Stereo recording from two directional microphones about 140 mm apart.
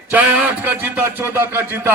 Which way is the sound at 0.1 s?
10° right (ahead or behind).